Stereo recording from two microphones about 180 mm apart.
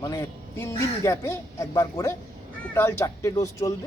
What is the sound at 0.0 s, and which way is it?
A man's voice, 15° left (ahead or behind).